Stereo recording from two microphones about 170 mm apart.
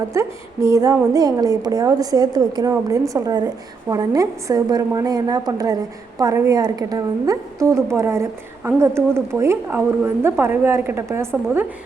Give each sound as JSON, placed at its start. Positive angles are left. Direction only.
{"t": 0.1, "sound": "a woman's voice", "side_deg": -15}